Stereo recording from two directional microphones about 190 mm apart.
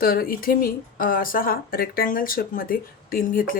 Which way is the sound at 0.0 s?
50° left (ahead or behind).